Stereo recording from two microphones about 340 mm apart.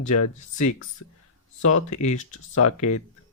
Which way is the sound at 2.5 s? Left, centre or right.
Left.